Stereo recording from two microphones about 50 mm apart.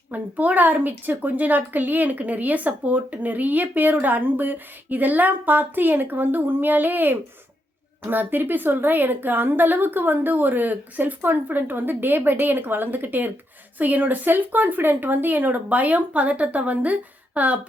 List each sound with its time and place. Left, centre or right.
0.1 s speech: right